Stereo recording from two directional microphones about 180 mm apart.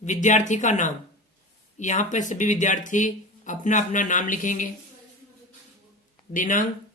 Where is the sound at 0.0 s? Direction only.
40° left (ahead or behind).